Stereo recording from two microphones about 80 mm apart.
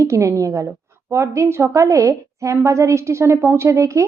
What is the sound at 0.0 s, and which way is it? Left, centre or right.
A woman's voice, right.